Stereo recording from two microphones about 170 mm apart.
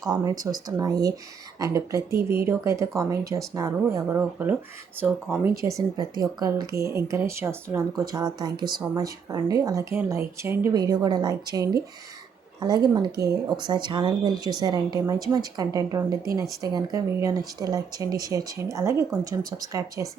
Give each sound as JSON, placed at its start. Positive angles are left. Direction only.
{"t": 0.3, "sound": "speech", "side_deg": -20}
{"t": 2.0, "sound": "speech", "side_deg": -65}
{"t": 2.4, "sound": "speech", "side_deg": -15}